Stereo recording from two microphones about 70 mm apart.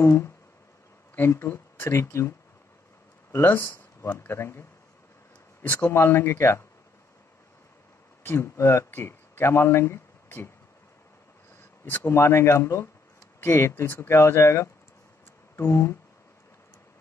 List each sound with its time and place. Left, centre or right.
0.0 s speech: left
5.6 s speech: left
8.2 s speech: left
11.8 s speech: left